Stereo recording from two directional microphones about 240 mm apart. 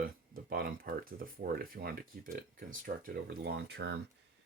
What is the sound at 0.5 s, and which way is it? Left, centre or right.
Speech, right.